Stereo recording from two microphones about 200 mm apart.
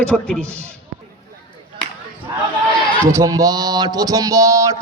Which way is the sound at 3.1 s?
15° right (ahead or behind).